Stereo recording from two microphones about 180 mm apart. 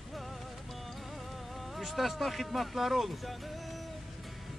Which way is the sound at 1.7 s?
Centre (ahead or behind).